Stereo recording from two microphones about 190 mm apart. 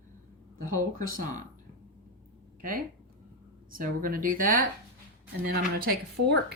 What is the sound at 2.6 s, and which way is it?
Speech, 45° right (ahead or behind).